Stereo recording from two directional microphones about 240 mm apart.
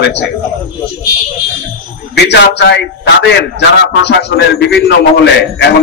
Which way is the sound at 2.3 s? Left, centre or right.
Left.